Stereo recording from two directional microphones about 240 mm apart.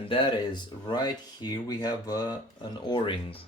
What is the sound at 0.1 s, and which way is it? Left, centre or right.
Speech, centre.